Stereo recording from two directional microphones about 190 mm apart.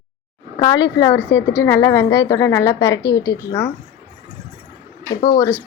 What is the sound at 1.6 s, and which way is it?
A woman's voice, 20° left (ahead or behind).